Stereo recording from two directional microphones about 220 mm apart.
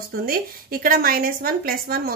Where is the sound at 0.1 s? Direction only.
40° right (ahead or behind).